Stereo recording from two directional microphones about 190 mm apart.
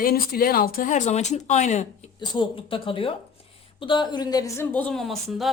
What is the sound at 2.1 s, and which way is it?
A woman's voice, 25° left (ahead or behind).